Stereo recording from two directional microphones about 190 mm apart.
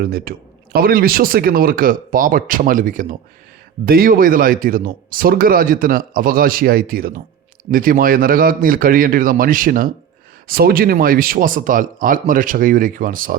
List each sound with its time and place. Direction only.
0.0 s speech: 50° right (ahead or behind)